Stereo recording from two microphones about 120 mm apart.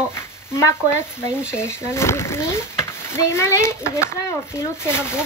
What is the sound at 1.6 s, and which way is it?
Speech, 20° left (ahead or behind).